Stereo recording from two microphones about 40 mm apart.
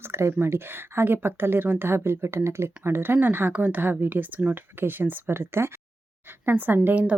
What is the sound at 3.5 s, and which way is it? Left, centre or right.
A woman's voice, right.